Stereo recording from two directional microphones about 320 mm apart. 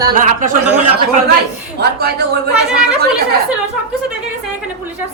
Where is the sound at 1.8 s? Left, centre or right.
Right.